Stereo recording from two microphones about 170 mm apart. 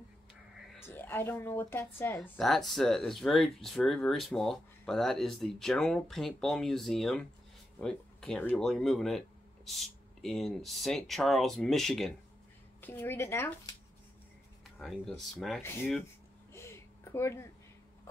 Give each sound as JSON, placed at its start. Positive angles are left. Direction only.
{"t": 0.8, "sound": "a woman's voice", "side_deg": 10}
{"t": 12.8, "sound": "speech", "side_deg": 15}
{"t": 14.8, "sound": "a woman's voice", "side_deg": 0}
{"t": 15.6, "sound": "speech", "side_deg": 15}
{"t": 16.5, "sound": "a sound", "side_deg": 15}